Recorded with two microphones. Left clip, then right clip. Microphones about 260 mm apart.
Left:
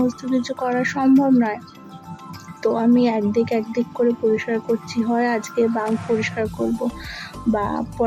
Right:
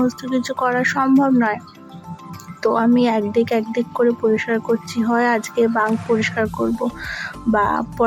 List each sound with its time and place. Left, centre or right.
0.0 s speech: centre
2.6 s speech: centre